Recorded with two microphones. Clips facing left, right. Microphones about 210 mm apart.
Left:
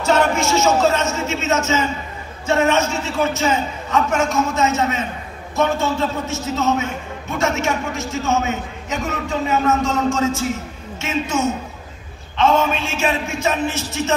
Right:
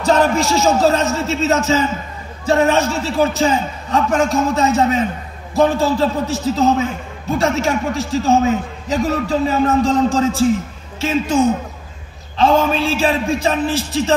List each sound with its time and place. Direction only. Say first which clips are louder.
0.0 s a man's voice: right 2 dB; 35° right (ahead or behind)